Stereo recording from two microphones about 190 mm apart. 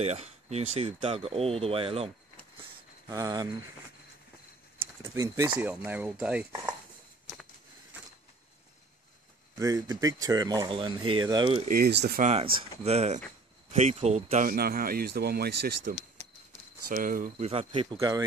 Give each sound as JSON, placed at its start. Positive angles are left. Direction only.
{"t": 0.0, "sound": "speech", "side_deg": -35}
{"t": 3.1, "sound": "speech", "side_deg": -20}
{"t": 5.0, "sound": "speech", "side_deg": -15}
{"t": 9.6, "sound": "speech", "side_deg": -15}
{"t": 11.6, "sound": "speech", "side_deg": -50}
{"t": 12.2, "sound": "speech", "side_deg": -35}
{"t": 14.5, "sound": "speech", "side_deg": -50}
{"t": 17.5, "sound": "speech", "side_deg": -30}
{"t": 17.9, "sound": "speech", "side_deg": -20}